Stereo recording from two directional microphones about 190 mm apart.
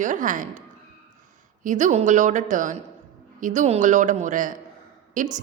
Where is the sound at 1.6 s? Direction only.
40° right (ahead or behind).